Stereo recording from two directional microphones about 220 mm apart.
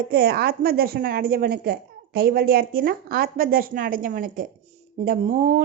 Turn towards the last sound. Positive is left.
turn(degrees=-35)  # may be behind; listen again after turning